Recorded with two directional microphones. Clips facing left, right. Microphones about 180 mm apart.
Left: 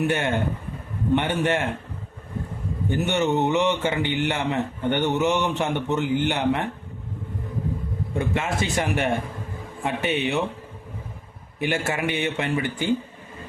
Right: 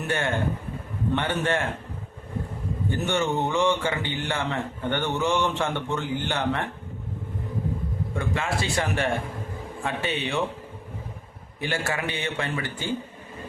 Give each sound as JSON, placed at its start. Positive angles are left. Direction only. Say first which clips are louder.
{"t": 0.1, "sound": "a man's voice", "louder": "left 2 dB", "side_deg": 20}
{"t": 2.9, "sound": "speech", "louder": "left 3 dB", "side_deg": 20}
{"t": 8.2, "sound": "a man's voice", "louder": "left 3 dB", "side_deg": 20}
{"t": 11.6, "sound": "speech", "louder": "left 3 dB", "side_deg": 20}